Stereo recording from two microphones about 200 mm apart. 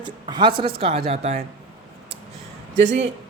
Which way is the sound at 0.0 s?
25° right (ahead or behind).